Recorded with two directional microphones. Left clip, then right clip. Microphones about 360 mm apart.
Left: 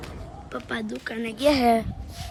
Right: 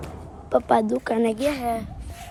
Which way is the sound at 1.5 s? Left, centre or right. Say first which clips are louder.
Left 6 dB; centre.